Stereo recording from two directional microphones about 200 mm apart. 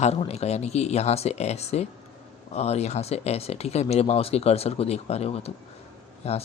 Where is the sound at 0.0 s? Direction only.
30° left (ahead or behind).